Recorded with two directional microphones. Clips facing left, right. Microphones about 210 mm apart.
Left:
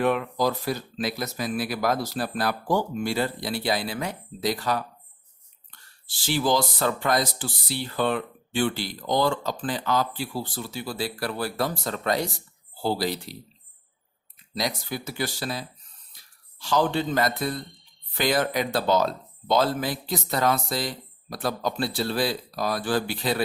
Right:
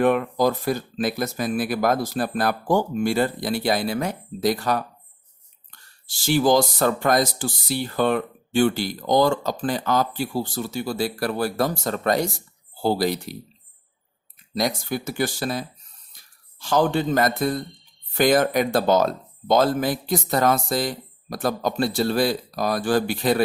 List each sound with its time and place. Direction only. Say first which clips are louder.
0.0 s speech: right 4 dB; 50° right (ahead or behind)
6.1 s speech: right 5 dB; 45° right (ahead or behind)
14.5 s speech: right 5 dB; 50° right (ahead or behind)